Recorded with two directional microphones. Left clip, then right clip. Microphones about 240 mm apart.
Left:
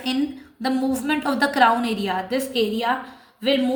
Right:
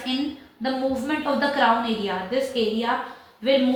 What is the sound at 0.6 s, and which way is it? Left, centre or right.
A woman's voice, left.